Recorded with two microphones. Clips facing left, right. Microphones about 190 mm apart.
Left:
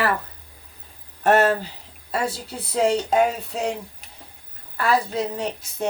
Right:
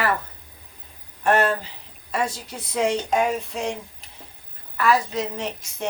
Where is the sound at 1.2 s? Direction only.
40° left (ahead or behind).